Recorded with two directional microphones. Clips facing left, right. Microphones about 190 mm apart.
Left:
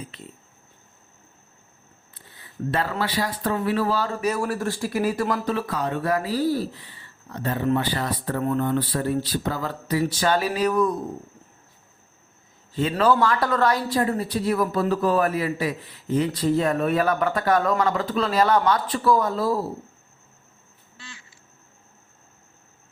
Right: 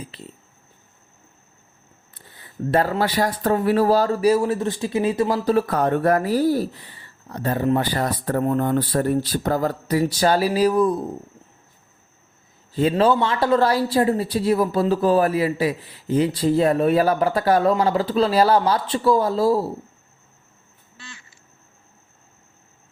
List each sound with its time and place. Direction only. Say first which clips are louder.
0.1 s speech: right 2 dB; 35° right (ahead or behind)
2.6 s speech: right 6 dB; 40° right (ahead or behind); by 5.4 s 25° right (ahead or behind)
5.5 s speech: right 7 dB; 50° right (ahead or behind); by 10.9 s 30° right (ahead or behind)
12.9 s speech: even; 25° right (ahead or behind)